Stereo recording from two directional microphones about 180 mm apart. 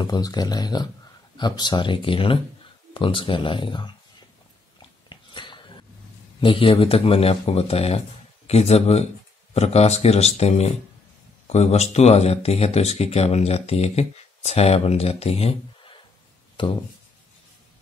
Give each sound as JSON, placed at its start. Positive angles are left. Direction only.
{"t": 0.0, "sound": "speech", "side_deg": 25}
{"t": 5.1, "sound": "a sound", "side_deg": 25}
{"t": 6.4, "sound": "speech", "side_deg": 30}